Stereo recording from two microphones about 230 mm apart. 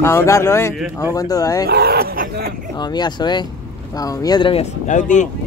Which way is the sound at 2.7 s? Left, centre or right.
Centre.